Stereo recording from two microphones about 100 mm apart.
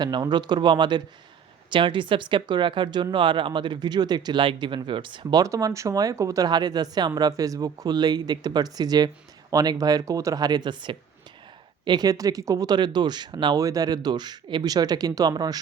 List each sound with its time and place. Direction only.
0.0 s speech: 45° right (ahead or behind)
5.4 s speech: 35° right (ahead or behind)
6.5 s speech: 45° right (ahead or behind)